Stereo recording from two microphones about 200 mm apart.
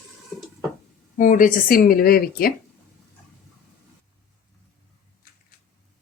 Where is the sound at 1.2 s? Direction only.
40° left (ahead or behind).